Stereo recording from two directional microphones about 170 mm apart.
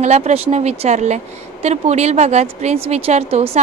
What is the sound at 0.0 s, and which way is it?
A woman's voice, 40° right (ahead or behind).